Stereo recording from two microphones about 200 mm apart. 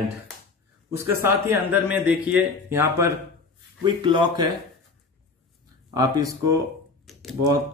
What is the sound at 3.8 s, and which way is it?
Speech, 25° right (ahead or behind).